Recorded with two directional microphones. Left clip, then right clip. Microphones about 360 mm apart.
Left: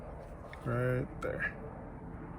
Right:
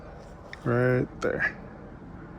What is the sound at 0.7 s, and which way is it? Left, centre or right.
Speech, centre.